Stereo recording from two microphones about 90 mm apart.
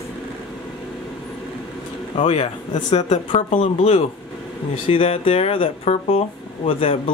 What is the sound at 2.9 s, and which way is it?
Speech, 90° left.